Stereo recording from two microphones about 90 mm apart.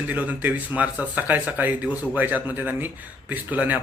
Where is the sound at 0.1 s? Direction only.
20° right (ahead or behind).